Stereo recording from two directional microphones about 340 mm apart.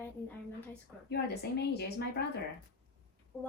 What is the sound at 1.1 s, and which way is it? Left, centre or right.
A woman's voice, left.